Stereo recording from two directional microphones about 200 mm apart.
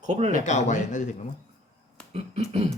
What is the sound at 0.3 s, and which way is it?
Speech, 35° left (ahead or behind).